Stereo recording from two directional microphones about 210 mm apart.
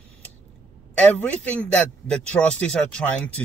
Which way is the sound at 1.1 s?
5° left (ahead or behind).